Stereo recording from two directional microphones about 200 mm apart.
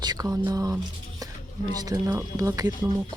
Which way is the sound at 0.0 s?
20° right (ahead or behind).